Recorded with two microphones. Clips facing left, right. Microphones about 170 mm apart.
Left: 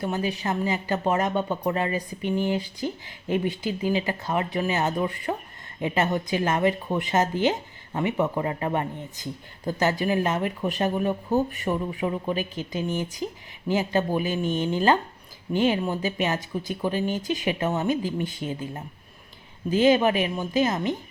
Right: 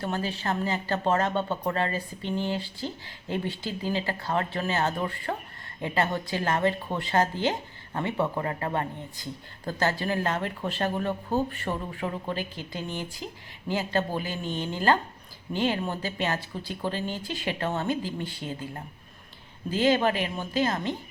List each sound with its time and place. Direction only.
0.0 s speech: 15° left (ahead or behind)